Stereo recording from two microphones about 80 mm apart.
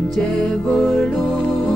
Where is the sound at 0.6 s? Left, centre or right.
Centre.